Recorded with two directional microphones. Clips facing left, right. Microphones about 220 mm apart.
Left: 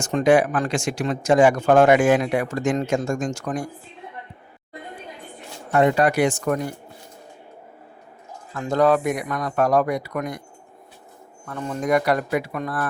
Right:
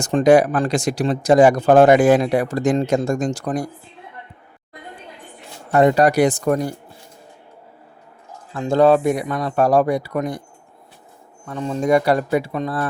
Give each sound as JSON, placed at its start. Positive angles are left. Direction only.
{"t": 0.0, "sound": "speech", "side_deg": -35}
{"t": 5.7, "sound": "speech", "side_deg": -40}
{"t": 8.5, "sound": "speech", "side_deg": -30}
{"t": 11.4, "sound": "speech", "side_deg": -25}